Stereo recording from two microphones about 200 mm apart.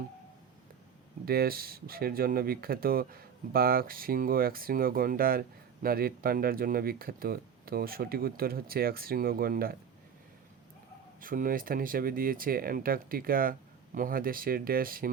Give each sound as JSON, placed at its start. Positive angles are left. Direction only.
{"t": 1.2, "sound": "speech", "side_deg": -50}
{"t": 11.2, "sound": "speech", "side_deg": -45}